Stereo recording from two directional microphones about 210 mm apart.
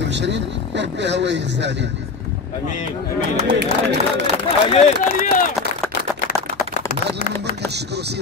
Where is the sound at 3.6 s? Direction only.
50° right (ahead or behind).